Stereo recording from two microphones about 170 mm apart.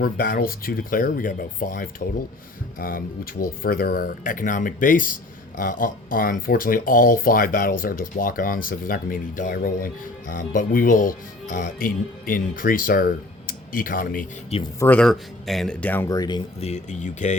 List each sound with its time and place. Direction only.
0.0 s speech: 60° left (ahead or behind)
14.8 s speech: 10° left (ahead or behind)
16.0 s speech: 25° left (ahead or behind)
16.6 s speech: 40° left (ahead or behind)